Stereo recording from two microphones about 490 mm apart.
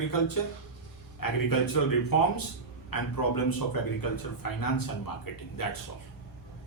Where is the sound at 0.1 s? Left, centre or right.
Left.